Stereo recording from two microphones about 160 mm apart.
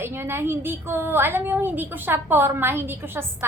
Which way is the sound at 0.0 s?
15° right (ahead or behind).